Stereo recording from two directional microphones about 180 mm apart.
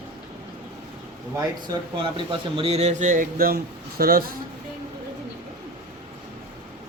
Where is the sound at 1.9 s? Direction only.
30° right (ahead or behind); by 4.2 s 55° right (ahead or behind).